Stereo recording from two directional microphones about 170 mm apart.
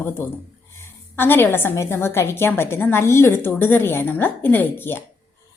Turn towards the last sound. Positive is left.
turn(degrees=10)  # may be behind; listen again after turning